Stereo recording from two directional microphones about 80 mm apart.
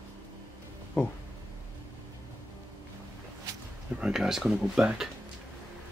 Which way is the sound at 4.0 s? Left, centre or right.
Centre.